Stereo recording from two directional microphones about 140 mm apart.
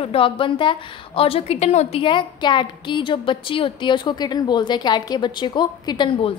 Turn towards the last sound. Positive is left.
turn(degrees=35)  # may be behind; listen again after turning